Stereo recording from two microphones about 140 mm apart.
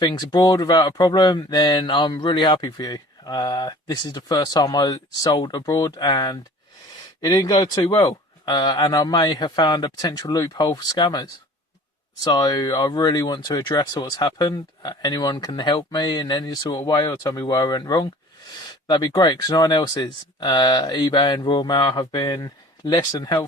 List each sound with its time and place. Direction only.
0.0 s speech: 30° left (ahead or behind)